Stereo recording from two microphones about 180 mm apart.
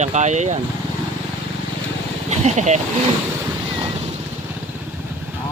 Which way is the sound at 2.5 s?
40° right (ahead or behind).